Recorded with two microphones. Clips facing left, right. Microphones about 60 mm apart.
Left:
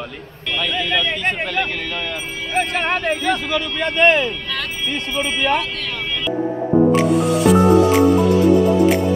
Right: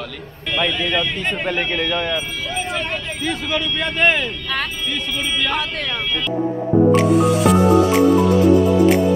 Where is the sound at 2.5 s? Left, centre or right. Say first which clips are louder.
Left 6 dB; left.